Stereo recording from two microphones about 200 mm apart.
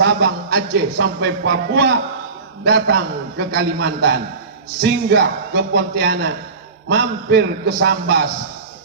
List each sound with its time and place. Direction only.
0.0 s a man's voice: 55° right (ahead or behind)